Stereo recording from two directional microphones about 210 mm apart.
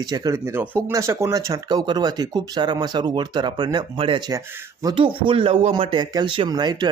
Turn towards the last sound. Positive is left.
turn(degrees=-20)  # may be behind; listen again after turning